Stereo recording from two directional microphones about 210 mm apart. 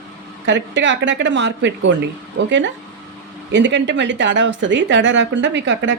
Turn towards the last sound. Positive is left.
turn(degrees=-60)  # may be behind; listen again after turning